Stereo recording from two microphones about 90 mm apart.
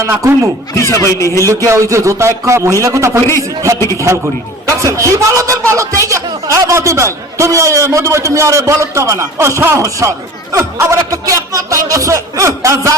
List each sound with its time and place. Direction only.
0.0 s speech: 30° right (ahead or behind)
0.8 s a man's voice: 30° left (ahead or behind)
1.6 s speech: 35° right (ahead or behind)